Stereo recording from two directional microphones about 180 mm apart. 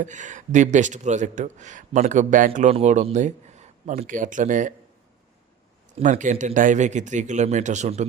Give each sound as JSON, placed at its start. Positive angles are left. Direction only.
{"t": 0.0, "sound": "speech", "side_deg": -45}
{"t": 6.0, "sound": "speech", "side_deg": -45}